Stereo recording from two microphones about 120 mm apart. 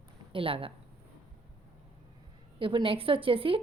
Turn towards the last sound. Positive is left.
turn(degrees=-50)  # may be behind; listen again after turning